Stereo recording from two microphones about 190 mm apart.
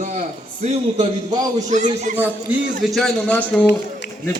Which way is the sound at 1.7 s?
40° right (ahead or behind).